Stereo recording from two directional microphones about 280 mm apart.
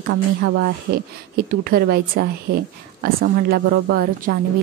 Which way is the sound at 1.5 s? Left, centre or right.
Right.